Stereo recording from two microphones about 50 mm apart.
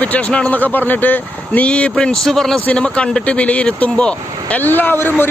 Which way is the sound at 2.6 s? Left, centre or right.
Left.